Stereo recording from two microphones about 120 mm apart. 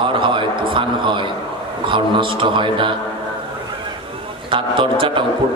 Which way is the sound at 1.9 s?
45° right (ahead or behind).